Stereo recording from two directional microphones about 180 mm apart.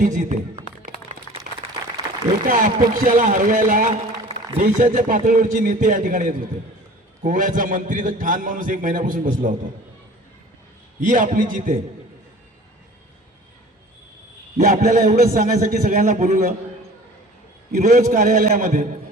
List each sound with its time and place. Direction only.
0.0 s a sound: 45° right (ahead or behind)
2.5 s a man's voice: 45° right (ahead or behind)
11.0 s a man's voice: 45° right (ahead or behind)
14.6 s a man's voice: 45° right (ahead or behind)
17.7 s a man's voice: 45° right (ahead or behind)